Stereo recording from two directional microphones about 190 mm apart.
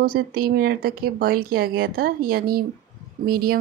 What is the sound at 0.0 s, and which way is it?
Speech, 50° right (ahead or behind).